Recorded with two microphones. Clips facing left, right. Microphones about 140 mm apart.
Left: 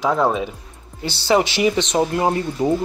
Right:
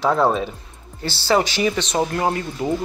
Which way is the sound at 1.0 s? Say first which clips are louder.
Left 1 dB; 20° left (ahead or behind).